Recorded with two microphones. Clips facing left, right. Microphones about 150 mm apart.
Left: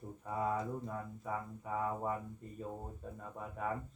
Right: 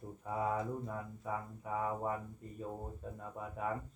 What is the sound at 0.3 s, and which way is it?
Speech, 5° right (ahead or behind).